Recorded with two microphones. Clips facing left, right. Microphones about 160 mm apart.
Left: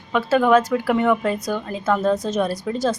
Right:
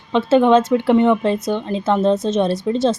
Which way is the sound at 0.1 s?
25° right (ahead or behind).